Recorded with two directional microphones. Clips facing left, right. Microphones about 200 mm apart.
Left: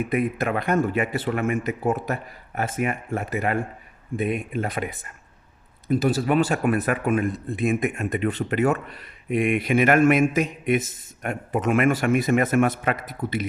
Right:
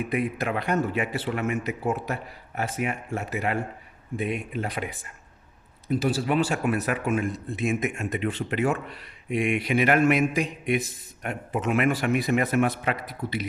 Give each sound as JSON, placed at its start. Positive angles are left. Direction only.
{"t": 0.1, "sound": "speech", "side_deg": 50}
{"t": 5.9, "sound": "speech", "side_deg": 50}